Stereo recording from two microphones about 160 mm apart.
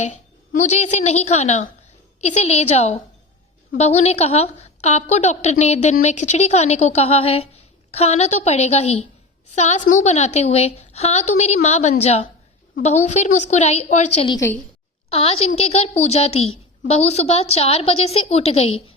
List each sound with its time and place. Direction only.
0.0 s a woman's voice: 50° left (ahead or behind)
14.3 s a woman's voice: 20° left (ahead or behind)
15.1 s a woman's voice: 40° left (ahead or behind)